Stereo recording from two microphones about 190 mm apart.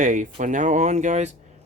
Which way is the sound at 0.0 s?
40° right (ahead or behind).